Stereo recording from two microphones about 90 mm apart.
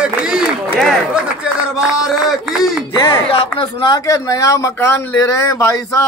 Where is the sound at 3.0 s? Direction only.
85° left.